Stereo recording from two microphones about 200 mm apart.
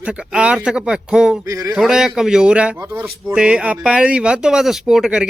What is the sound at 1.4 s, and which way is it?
Speech, 15° right (ahead or behind).